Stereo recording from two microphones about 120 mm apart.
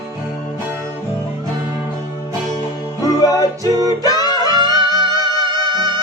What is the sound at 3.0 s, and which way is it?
Music, 30° left (ahead or behind).